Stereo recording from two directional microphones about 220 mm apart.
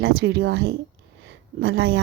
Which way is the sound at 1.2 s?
50° right (ahead or behind).